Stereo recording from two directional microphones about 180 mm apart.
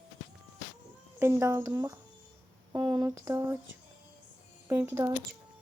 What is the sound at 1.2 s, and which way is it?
Speech, 15° right (ahead or behind).